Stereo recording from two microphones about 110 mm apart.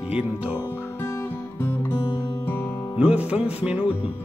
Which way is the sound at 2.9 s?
10° right (ahead or behind).